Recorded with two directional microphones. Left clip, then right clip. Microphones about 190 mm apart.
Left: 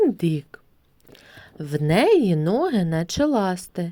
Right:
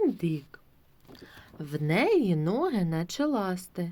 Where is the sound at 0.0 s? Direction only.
40° left (ahead or behind).